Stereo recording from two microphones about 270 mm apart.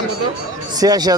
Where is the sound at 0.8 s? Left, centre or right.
Centre.